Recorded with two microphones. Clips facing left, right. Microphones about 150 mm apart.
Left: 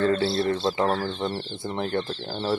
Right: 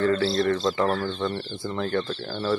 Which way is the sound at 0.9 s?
30° left (ahead or behind).